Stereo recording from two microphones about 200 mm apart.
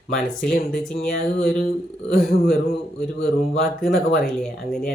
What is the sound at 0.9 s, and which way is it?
Speech, 50° left (ahead or behind).